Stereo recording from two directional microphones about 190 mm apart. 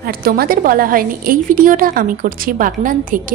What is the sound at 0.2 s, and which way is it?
A woman's voice, 50° right (ahead or behind).